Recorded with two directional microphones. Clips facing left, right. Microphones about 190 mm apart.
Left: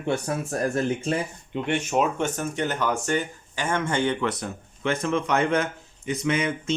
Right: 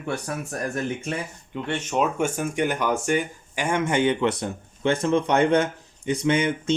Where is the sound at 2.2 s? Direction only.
10° right (ahead or behind).